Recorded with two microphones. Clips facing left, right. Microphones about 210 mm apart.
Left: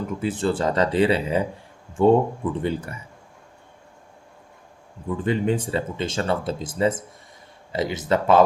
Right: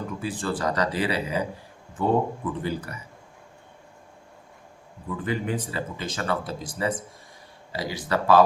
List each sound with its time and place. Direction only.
0.2 s speech: 25° left (ahead or behind)
5.1 s speech: 25° left (ahead or behind)